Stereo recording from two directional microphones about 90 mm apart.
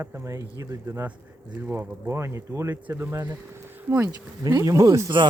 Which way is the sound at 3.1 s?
40° right (ahead or behind).